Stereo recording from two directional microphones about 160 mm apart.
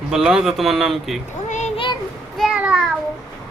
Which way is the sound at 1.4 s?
45° left (ahead or behind).